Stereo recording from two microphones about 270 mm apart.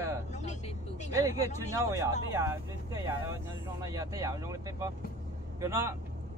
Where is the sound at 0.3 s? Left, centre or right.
Left.